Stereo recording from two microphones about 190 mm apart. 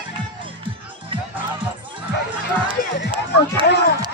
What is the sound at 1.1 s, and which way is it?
Music, 25° right (ahead or behind).